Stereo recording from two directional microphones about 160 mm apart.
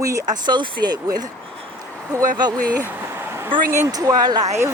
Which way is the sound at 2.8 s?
15° right (ahead or behind).